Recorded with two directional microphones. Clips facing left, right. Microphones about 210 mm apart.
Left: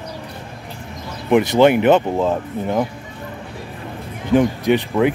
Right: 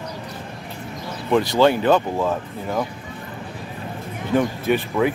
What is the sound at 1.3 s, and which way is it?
Speech, 20° left (ahead or behind).